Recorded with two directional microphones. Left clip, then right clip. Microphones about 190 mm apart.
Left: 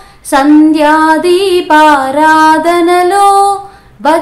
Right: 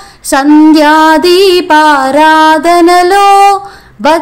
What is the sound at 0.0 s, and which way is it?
Music, 35° right (ahead or behind).